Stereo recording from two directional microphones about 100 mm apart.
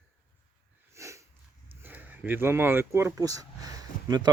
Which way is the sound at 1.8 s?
15° right (ahead or behind).